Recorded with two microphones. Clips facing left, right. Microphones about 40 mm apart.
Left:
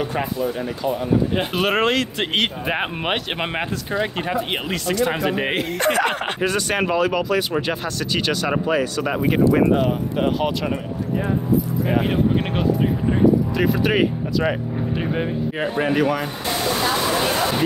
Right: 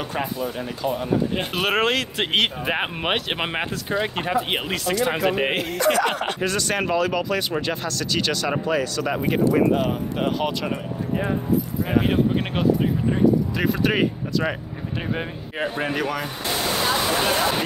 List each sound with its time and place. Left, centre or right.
0.1 s speech: centre
5.9 s speech: left
6.4 s speech: centre
11.9 s speech: centre
16.8 s waterfall: centre